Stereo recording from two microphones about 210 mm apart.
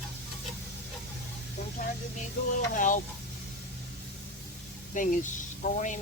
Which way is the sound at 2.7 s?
40° left (ahead or behind).